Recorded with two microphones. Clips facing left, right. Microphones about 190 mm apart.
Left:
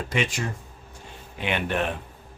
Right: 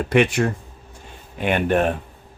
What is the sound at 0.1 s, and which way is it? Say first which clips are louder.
Speech: right 11 dB; 60° right (ahead or behind).